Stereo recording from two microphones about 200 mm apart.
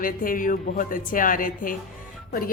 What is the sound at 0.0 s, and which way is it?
A woman's voice, 45° left (ahead or behind).